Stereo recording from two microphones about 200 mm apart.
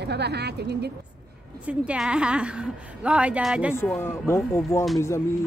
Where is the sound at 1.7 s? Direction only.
5° right (ahead or behind).